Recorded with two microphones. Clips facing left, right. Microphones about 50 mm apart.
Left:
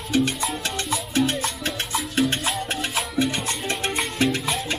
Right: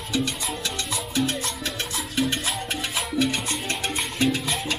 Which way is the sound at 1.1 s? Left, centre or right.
Left.